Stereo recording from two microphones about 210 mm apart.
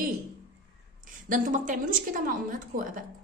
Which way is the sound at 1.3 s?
40° right (ahead or behind).